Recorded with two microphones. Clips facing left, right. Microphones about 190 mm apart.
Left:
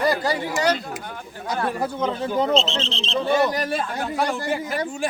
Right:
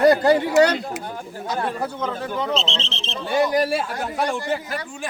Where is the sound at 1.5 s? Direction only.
15° left (ahead or behind).